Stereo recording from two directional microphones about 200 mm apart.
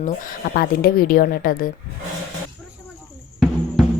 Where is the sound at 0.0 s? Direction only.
45° left (ahead or behind).